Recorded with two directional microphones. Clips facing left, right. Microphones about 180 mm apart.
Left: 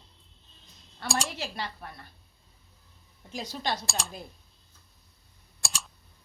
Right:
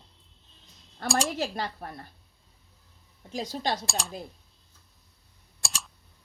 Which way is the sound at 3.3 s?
45° right (ahead or behind).